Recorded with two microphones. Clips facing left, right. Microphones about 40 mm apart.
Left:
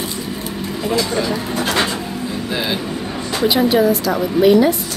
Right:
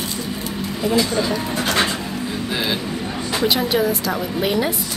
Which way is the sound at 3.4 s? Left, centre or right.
Centre.